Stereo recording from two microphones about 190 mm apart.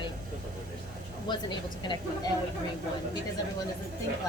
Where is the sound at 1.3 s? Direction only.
25° left (ahead or behind).